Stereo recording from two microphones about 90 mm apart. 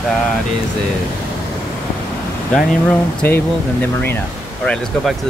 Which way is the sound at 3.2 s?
20° left (ahead or behind).